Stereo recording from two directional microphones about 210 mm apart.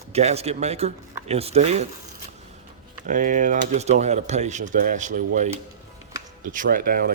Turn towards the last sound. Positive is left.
turn(degrees=-45)  # may be behind; listen again after turning